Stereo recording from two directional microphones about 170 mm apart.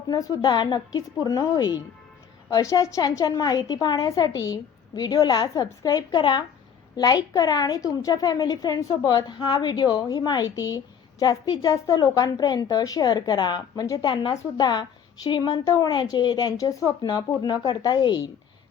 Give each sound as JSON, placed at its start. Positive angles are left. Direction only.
{"t": 0.1, "sound": "a woman's voice", "side_deg": 20}